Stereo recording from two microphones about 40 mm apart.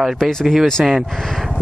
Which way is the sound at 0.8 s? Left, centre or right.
Right.